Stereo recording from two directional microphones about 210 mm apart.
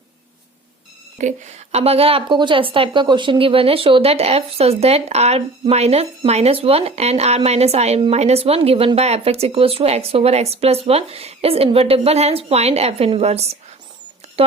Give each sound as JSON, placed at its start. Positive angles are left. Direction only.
{"t": 1.2, "sound": "a woman's voice", "side_deg": -30}